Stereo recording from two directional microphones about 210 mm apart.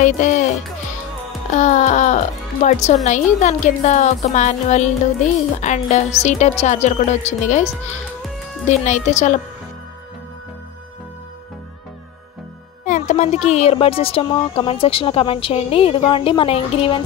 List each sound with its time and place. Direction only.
0.0 s speech: 35° left (ahead or behind)
1.5 s speech: 35° left (ahead or behind)
8.6 s speech: 35° left (ahead or behind)
12.8 s speech: 35° left (ahead or behind)